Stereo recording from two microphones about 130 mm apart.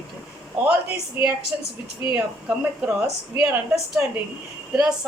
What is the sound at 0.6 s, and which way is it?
A woman's voice, 15° right (ahead or behind).